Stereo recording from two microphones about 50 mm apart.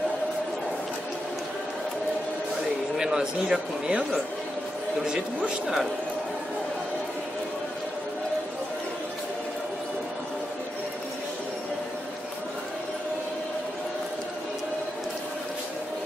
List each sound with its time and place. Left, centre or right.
3.0 s speech: centre
5.0 s speech: centre